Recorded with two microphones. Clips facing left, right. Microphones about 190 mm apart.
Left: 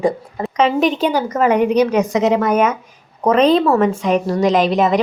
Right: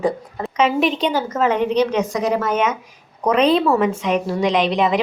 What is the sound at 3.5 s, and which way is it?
A woman's voice, 5° right (ahead or behind).